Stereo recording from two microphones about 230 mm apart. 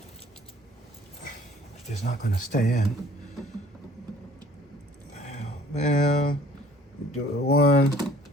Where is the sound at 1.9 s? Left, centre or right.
Left.